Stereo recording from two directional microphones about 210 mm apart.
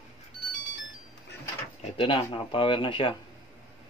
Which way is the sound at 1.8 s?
25° left (ahead or behind).